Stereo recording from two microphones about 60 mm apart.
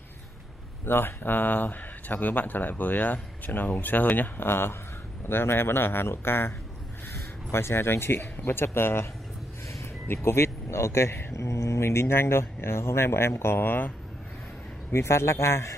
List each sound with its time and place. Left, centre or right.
0.8 s speech: left
7.5 s speech: left
14.9 s speech: left